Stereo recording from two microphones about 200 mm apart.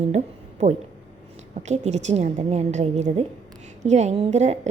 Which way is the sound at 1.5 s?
35° right (ahead or behind).